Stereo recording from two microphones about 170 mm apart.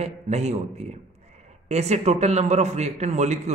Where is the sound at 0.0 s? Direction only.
40° right (ahead or behind).